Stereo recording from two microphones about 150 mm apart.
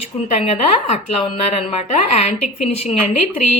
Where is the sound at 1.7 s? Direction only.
50° left (ahead or behind).